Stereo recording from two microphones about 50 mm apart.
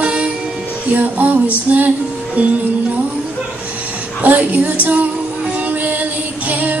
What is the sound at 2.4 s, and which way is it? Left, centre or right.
Music, right.